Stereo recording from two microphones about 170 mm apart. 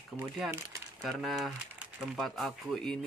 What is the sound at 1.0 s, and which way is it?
Speech, centre (ahead or behind).